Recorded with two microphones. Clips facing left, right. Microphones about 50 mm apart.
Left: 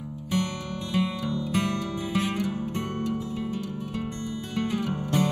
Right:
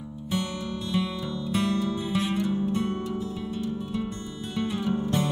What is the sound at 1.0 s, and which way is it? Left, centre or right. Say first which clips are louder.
Music: left 2 dB; left.